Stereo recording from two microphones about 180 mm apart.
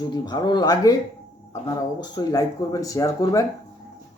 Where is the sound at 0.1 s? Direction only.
25° left (ahead or behind).